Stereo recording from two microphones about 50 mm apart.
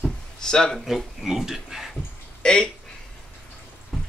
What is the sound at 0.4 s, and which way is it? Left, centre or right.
Speech, centre.